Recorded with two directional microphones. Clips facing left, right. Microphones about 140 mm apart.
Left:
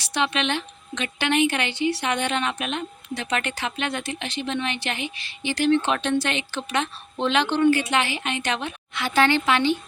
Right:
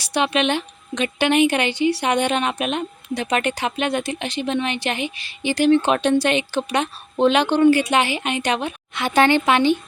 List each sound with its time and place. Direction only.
0.0 s a woman's voice: 15° right (ahead or behind)
7.7 s a woman's voice: 15° right (ahead or behind)